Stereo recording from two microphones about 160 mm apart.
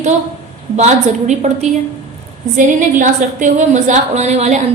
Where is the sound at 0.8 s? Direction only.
45° right (ahead or behind).